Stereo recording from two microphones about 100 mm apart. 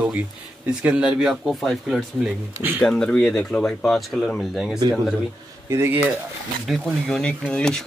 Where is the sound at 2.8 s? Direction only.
10° left (ahead or behind).